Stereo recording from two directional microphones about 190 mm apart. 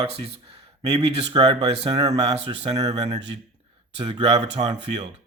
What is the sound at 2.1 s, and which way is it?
Speech, 35° right (ahead or behind).